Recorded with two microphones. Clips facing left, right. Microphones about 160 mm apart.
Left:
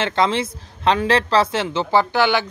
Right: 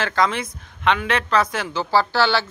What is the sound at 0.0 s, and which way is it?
A woman's voice, 25° left (ahead or behind).